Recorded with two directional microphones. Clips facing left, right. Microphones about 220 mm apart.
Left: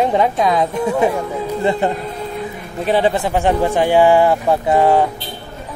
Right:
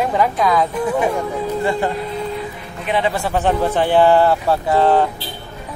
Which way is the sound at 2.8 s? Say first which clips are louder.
Left 4 dB; 30° left (ahead or behind).